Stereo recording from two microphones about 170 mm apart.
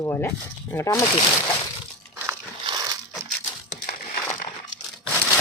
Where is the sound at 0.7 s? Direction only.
20° left (ahead or behind).